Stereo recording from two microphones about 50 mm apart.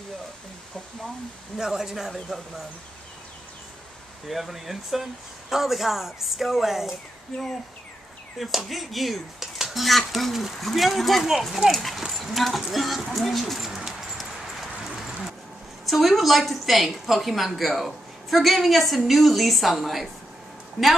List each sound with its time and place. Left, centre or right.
1.6 s a woman's voice: centre
4.3 s a woman's voice: centre
8.4 s a woman's voice: centre
13.7 s bird: centre
14.9 s vehicle: centre
15.8 s a woman's voice: centre